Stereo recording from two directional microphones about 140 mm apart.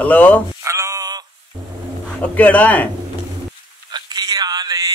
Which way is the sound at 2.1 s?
10° left (ahead or behind).